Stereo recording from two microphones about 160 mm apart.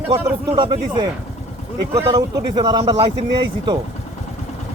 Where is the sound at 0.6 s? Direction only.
25° right (ahead or behind).